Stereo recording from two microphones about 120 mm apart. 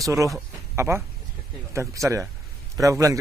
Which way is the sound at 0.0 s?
25° right (ahead or behind).